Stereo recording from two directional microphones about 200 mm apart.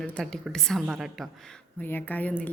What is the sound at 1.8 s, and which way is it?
Speech, 10° left (ahead or behind).